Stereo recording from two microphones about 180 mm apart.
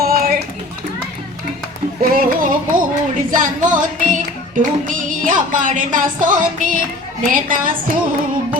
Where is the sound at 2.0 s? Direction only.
50° right (ahead or behind).